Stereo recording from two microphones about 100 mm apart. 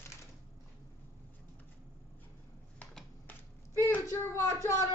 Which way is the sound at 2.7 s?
15° left (ahead or behind).